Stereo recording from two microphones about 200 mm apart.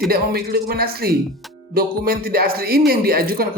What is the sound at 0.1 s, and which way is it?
Speech, 50° right (ahead or behind).